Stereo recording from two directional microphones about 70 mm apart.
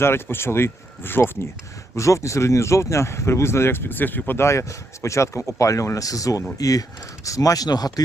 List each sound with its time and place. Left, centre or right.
0.0 s speech: left
2.0 s speech: left
5.0 s speech: left